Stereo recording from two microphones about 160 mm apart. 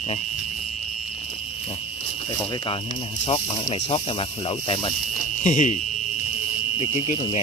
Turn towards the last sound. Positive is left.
turn(degrees=35)  # may be behind; listen again after turning